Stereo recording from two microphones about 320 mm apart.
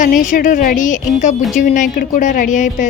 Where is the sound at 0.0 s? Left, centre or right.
Left.